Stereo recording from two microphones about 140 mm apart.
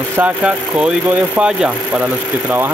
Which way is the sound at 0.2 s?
10° right (ahead or behind).